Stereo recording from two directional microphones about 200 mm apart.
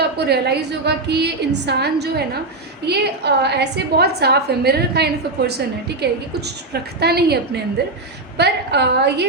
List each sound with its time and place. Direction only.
0.3 s a woman's voice: 55° right (ahead or behind)